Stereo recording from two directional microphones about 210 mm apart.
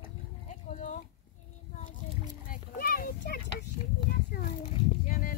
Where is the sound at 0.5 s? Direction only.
35° left (ahead or behind).